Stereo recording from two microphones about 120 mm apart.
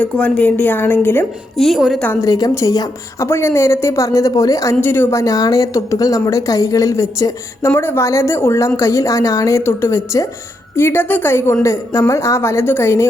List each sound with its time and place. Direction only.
0.0 s a woman's voice: 10° left (ahead or behind)
1.5 s a woman's voice: centre (ahead or behind)
2.2 s a woman's voice: 30° left (ahead or behind)